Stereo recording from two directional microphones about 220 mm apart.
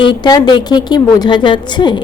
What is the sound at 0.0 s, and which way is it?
A woman's voice, 20° left (ahead or behind).